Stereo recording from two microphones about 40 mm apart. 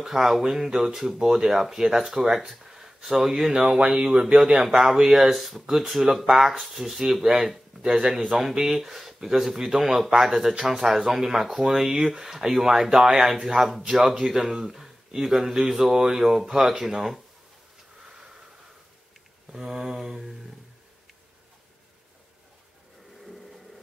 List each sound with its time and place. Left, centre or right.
0.0 s speech: centre
3.5 s speech: right
7.8 s speech: right
19.5 s speech: centre
23.2 s a sound: centre